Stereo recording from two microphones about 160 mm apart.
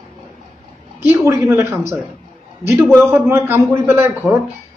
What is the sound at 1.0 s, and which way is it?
Speech, 15° right (ahead or behind).